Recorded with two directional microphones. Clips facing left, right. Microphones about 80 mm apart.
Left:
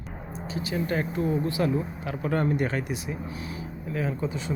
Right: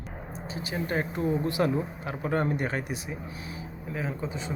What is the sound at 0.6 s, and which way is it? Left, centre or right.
Speech, right.